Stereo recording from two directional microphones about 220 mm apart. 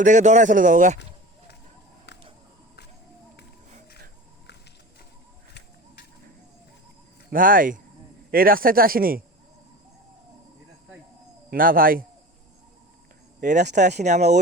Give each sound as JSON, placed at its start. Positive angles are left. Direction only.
{"t": 0.0, "sound": "speech", "side_deg": -35}
{"t": 3.7, "sound": "a sound", "side_deg": -30}
{"t": 7.3, "sound": "speech", "side_deg": -40}
{"t": 11.5, "sound": "speech", "side_deg": -40}
{"t": 13.4, "sound": "speech", "side_deg": -35}